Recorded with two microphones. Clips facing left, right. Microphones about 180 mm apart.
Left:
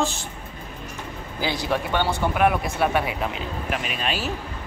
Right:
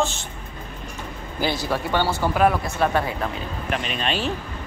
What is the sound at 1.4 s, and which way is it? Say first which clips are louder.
Speech: right 1 dB; 15° left (ahead or behind).